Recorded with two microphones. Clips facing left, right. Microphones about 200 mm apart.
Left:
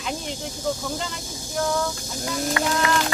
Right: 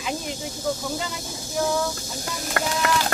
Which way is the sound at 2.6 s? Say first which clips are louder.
Right 1 dB; 50° right (ahead or behind).